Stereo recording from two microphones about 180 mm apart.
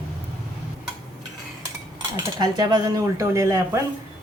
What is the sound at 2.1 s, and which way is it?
A woman's voice, 20° right (ahead or behind).